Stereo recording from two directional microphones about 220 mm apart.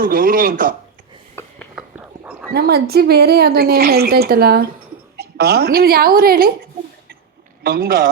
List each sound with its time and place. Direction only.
0.0 s speech: 40° right (ahead or behind)
1.4 s a sound: 10° left (ahead or behind)
1.7 s dog: 5° right (ahead or behind)
2.5 s a woman's voice: 45° right (ahead or behind)
7.6 s a woman's voice: 40° right (ahead or behind)